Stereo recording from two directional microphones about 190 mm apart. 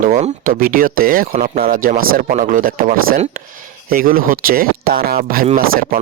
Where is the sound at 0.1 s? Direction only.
45° right (ahead or behind).